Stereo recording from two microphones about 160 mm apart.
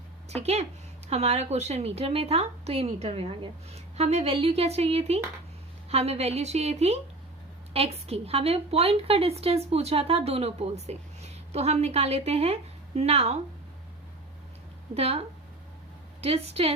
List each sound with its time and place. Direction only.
0.3 s speech: 40° right (ahead or behind)
14.9 s speech: 40° right (ahead or behind)
16.2 s speech: 40° right (ahead or behind)